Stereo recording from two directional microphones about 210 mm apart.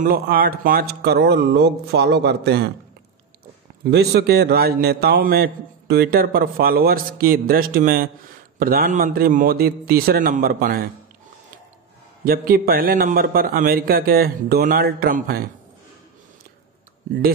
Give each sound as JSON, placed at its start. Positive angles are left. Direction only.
{"t": 0.0, "sound": "a man's voice", "side_deg": -45}
{"t": 3.9, "sound": "a man's voice", "side_deg": -50}
{"t": 12.3, "sound": "a man's voice", "side_deg": -45}